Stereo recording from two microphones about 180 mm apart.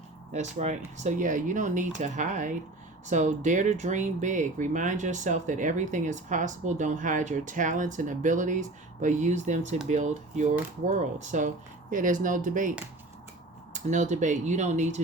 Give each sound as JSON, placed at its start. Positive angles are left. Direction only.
{"t": 0.3, "sound": "speech", "side_deg": -40}
{"t": 13.7, "sound": "speech", "side_deg": -40}